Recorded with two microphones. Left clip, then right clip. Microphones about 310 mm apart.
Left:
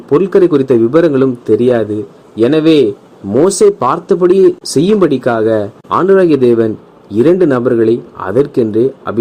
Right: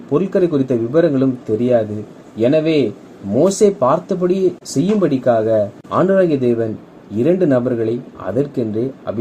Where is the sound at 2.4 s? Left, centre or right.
Left.